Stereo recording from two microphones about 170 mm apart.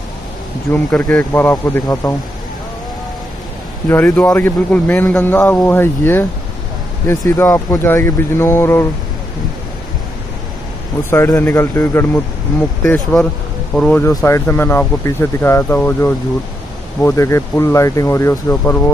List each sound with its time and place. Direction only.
0.9 s a man's voice: 10° left (ahead or behind)
3.9 s a man's voice: 10° left (ahead or behind)
11.1 s a man's voice: 15° left (ahead or behind)